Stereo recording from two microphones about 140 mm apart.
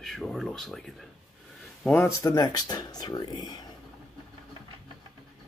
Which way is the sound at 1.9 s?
20° left (ahead or behind).